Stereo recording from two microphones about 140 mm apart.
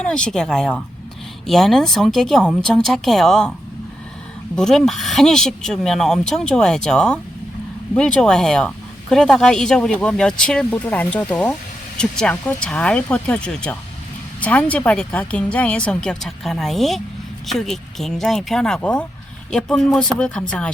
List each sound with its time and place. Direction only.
0.0 s speech: 5° left (ahead or behind)
4.5 s a woman's voice: 5° left (ahead or behind)